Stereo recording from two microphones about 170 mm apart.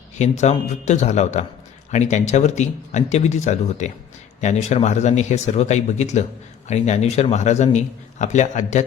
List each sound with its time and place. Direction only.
0.2 s speech: 40° left (ahead or behind)